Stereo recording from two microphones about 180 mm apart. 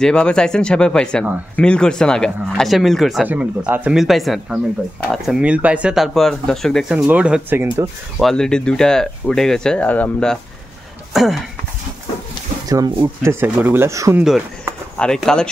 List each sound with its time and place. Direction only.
0.0 s speech: 5° left (ahead or behind)
8.2 s speech: centre (ahead or behind)
12.6 s speech: 20° right (ahead or behind)
15.0 s speech: 5° left (ahead or behind)